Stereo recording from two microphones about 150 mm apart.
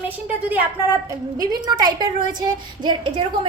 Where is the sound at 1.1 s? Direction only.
25° right (ahead or behind).